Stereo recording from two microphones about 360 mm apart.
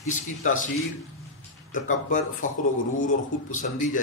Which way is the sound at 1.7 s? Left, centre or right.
Left.